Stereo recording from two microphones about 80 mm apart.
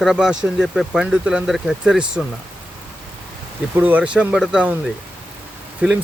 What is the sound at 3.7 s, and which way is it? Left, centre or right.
Speech, right.